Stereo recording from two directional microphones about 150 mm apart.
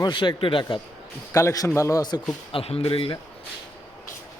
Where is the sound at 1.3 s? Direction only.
20° left (ahead or behind).